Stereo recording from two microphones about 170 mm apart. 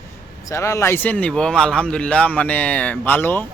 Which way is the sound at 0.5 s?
15° left (ahead or behind).